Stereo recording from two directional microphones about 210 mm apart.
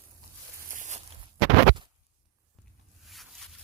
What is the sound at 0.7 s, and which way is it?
Walk, 35° right (ahead or behind).